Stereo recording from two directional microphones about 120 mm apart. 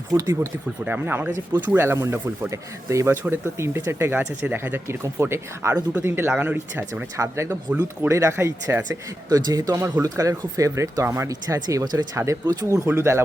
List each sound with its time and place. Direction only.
0.1 s speech: 30° right (ahead or behind)
0.9 s speech: 15° right (ahead or behind)
2.5 s speech: 25° right (ahead or behind)
7.2 s speech: 25° right (ahead or behind)
9.3 s speech: 30° right (ahead or behind)